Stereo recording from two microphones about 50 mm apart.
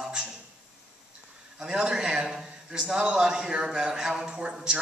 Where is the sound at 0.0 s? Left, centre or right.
Centre.